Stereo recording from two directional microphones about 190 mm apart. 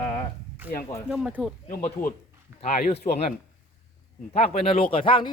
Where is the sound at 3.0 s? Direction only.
45° left (ahead or behind).